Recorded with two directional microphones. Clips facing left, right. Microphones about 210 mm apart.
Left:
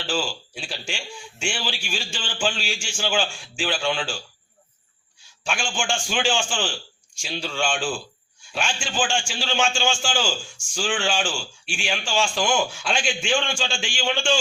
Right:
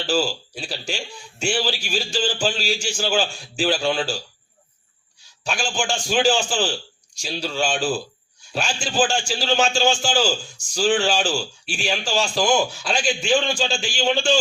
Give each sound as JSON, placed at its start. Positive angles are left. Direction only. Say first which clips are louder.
{"t": 0.0, "sound": "a man's voice", "louder": "right 5 dB", "side_deg": -40}
{"t": 5.4, "sound": "a man's voice", "louder": "right 3 dB", "side_deg": -40}